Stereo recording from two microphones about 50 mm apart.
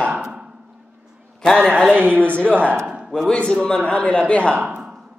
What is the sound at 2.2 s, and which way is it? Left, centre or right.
A man's voice, left.